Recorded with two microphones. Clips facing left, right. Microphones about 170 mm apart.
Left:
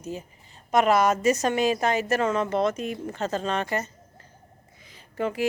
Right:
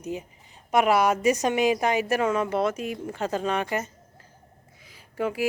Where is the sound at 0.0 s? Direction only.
15° right (ahead or behind).